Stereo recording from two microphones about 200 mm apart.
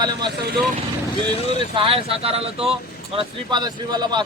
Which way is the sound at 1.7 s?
25° right (ahead or behind).